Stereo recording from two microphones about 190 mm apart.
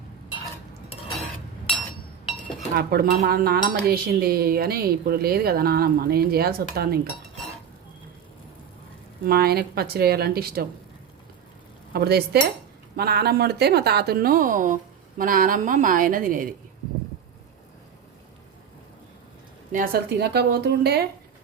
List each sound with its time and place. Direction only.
2.7 s speech: 55° right (ahead or behind)
9.2 s a woman's voice: 55° right (ahead or behind)
11.9 s a woman's voice: 55° right (ahead or behind)
19.7 s a woman's voice: 50° right (ahead or behind)